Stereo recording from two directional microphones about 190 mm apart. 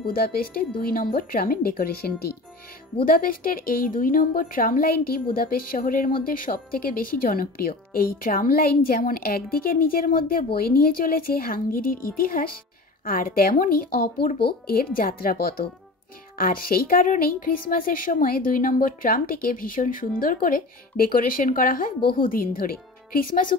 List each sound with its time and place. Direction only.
0.0 s a woman's voice: 50° left (ahead or behind)